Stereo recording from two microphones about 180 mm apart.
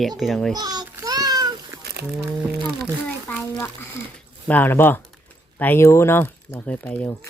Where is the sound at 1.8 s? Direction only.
65° right (ahead or behind).